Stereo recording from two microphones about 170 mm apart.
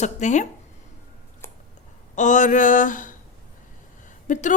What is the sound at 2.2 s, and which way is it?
Speech, 45° left (ahead or behind).